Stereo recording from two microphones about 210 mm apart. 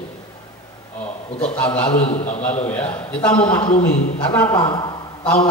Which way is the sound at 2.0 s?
30° left (ahead or behind).